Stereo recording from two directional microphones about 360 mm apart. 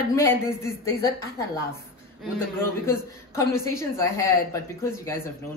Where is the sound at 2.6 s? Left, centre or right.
Centre.